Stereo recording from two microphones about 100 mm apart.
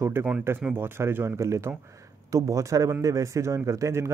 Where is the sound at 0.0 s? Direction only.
25° right (ahead or behind).